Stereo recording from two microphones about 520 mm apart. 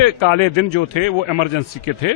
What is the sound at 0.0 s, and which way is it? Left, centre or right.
A man's voice, left.